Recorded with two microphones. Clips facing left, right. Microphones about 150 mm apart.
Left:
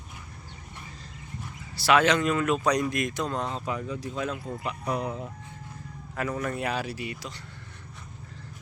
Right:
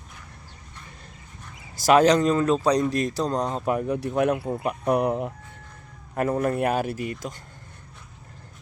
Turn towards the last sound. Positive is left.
turn(degrees=-45)  # may be behind; listen again after turning